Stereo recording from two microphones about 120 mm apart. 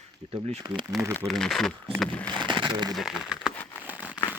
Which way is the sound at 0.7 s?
40° right (ahead or behind).